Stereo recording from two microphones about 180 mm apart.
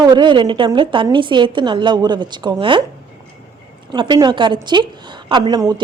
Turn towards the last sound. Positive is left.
turn(degrees=-20)  # may be behind; listen again after turning